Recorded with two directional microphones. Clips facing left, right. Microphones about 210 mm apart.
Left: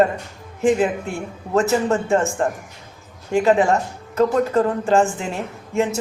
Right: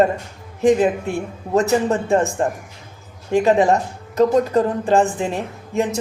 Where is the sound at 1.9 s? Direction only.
15° right (ahead or behind).